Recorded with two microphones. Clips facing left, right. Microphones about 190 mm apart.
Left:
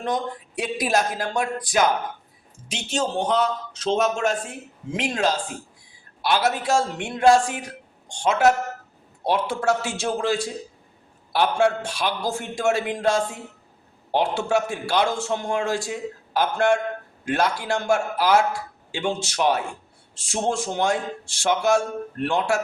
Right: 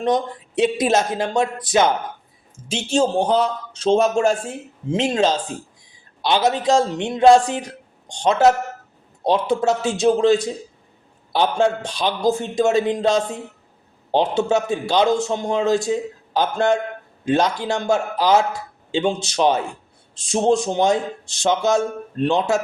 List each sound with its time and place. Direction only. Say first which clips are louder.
0.0 s a man's voice: right 6 dB; 20° right (ahead or behind)
9.2 s a man's voice: right 4 dB; 20° right (ahead or behind)